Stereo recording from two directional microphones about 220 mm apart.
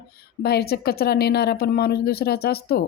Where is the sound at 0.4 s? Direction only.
45° left (ahead or behind).